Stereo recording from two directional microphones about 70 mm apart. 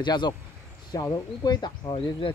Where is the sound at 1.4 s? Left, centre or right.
Left.